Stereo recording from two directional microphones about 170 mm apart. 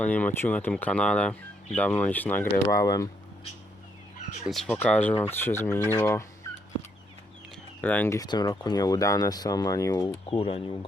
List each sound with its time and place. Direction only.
0.0 s speech: 10° left (ahead or behind)
2.6 s speech: 20° left (ahead or behind)
4.4 s speech: centre (ahead or behind)
7.8 s speech: 10° left (ahead or behind)
10.2 s speech: 30° left (ahead or behind)